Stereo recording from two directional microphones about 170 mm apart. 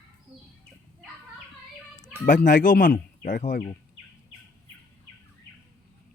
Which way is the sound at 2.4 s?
50° left (ahead or behind).